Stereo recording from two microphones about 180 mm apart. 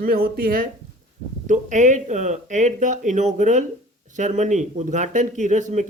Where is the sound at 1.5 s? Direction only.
40° right (ahead or behind).